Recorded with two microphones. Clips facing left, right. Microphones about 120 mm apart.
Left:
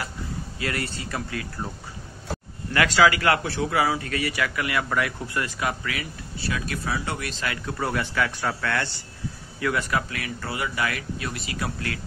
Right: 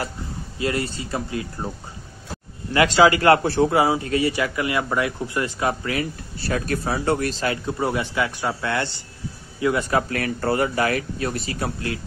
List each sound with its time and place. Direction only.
0.6 s a man's voice: 25° right (ahead or behind)
2.7 s a man's voice: 25° right (ahead or behind)
9.9 s speech: 45° right (ahead or behind)